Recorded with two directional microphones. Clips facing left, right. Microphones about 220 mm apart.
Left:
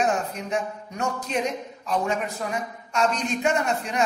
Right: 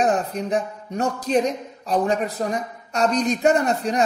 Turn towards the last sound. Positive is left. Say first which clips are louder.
# right 4 dB
turn(degrees=-35)  # may be behind; listen again after turning